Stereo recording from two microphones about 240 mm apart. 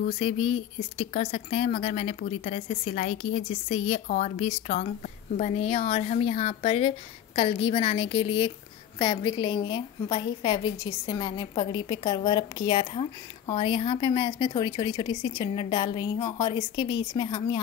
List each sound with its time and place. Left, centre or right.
0.0 s speech: left